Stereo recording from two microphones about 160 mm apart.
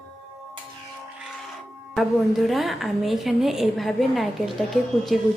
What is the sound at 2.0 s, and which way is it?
A woman's voice, centre (ahead or behind).